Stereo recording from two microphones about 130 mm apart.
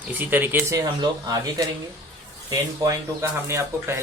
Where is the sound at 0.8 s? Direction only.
30° right (ahead or behind).